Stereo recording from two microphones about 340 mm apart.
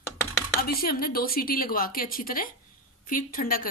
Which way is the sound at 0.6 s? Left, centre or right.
Left.